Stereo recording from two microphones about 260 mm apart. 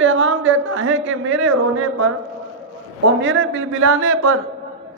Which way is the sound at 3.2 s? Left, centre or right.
Right.